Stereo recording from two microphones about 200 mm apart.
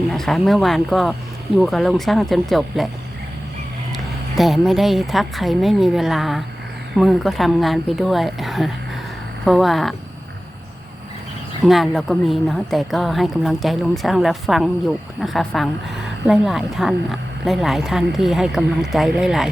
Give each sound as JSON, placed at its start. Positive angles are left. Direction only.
{"t": 0.1, "sound": "a woman's voice", "side_deg": 0}
{"t": 3.9, "sound": "a woman's voice", "side_deg": 0}
{"t": 11.6, "sound": "a woman's voice", "side_deg": 0}